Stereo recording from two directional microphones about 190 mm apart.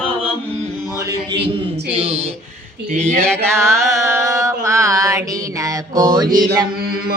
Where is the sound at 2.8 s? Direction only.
45° right (ahead or behind).